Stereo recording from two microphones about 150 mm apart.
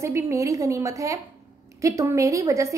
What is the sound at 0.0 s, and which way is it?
A woman's voice, 20° right (ahead or behind).